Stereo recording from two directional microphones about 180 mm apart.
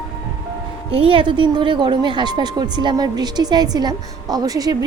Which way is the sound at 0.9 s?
30° right (ahead or behind).